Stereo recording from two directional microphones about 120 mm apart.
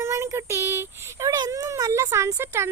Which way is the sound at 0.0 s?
25° right (ahead or behind).